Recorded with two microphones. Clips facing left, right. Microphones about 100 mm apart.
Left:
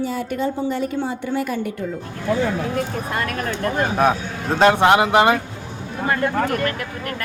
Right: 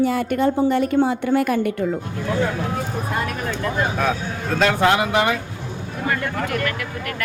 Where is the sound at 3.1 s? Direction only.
65° left (ahead or behind).